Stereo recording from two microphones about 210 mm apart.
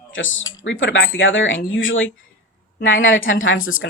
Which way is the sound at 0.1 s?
65° left (ahead or behind).